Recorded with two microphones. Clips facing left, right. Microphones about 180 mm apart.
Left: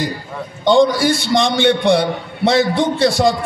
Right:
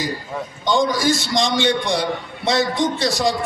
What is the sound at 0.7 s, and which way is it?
A man's voice, 60° left (ahead or behind).